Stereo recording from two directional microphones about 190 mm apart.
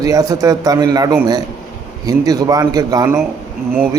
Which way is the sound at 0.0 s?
20° right (ahead or behind).